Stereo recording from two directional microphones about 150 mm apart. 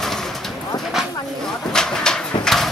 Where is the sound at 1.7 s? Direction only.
5° left (ahead or behind).